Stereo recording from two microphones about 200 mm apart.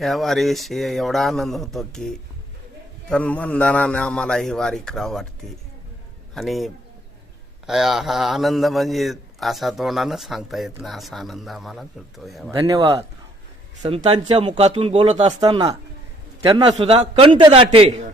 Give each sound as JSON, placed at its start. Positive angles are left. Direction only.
{"t": 0.0, "sound": "a man's voice", "side_deg": 0}
{"t": 6.3, "sound": "a man's voice", "side_deg": 0}
{"t": 7.7, "sound": "a man's voice", "side_deg": 0}
{"t": 12.5, "sound": "speech", "side_deg": -20}
{"t": 13.8, "sound": "a man's voice", "side_deg": -30}